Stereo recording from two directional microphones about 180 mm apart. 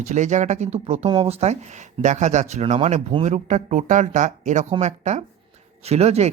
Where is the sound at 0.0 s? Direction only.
40° right (ahead or behind).